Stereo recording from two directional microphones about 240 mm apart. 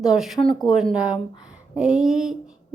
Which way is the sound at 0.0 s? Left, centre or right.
Centre.